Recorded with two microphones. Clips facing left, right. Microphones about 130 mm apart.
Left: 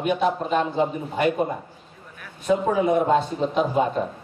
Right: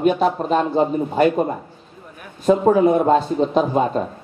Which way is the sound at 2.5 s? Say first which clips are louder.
Right 6 dB; 40° right (ahead or behind).